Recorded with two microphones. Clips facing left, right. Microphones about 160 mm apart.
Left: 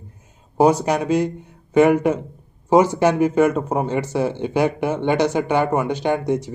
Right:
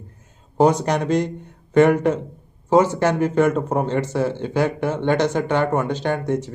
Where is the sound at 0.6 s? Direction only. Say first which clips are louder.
Left 1 dB; 5° left (ahead or behind).